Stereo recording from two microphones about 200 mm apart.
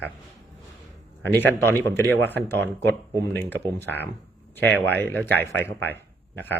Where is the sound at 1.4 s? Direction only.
10° left (ahead or behind).